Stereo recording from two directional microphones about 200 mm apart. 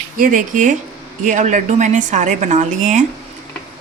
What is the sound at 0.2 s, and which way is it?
Speech, 40° right (ahead or behind).